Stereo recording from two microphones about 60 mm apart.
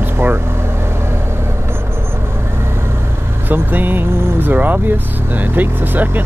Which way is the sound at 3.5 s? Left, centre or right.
Right.